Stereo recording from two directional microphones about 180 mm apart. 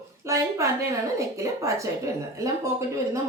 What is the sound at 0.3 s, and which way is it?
Speech, 15° right (ahead or behind).